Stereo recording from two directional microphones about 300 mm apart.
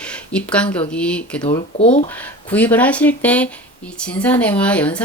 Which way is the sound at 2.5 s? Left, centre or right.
Centre.